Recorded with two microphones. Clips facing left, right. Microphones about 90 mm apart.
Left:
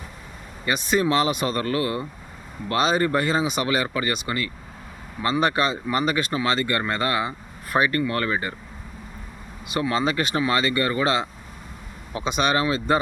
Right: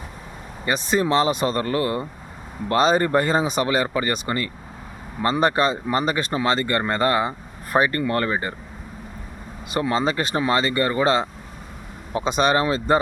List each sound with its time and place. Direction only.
0.6 s speech: 30° right (ahead or behind)
9.6 s speech: 35° right (ahead or behind)